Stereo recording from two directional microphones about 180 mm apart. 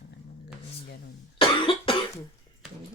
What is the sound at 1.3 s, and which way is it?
Cough, 30° left (ahead or behind).